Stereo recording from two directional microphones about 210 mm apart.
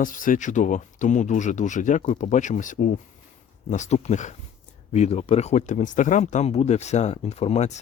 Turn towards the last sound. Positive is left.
turn(degrees=30)  # may be behind; listen again after turning